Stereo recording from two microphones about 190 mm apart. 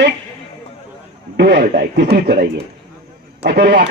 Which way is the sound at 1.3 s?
60° right (ahead or behind).